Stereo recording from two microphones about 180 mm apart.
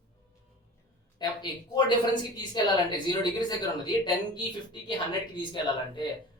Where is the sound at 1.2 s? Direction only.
25° left (ahead or behind).